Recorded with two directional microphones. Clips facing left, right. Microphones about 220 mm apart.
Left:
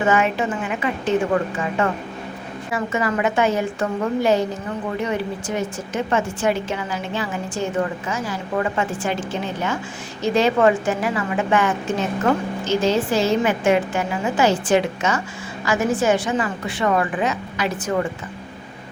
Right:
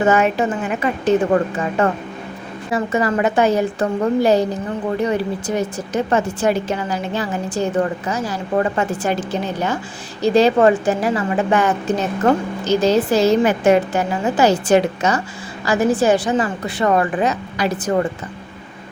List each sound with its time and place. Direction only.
0.0 s a woman's voice: 40° right (ahead or behind)